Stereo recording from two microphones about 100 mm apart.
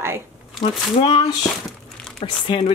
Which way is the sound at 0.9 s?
55° left (ahead or behind).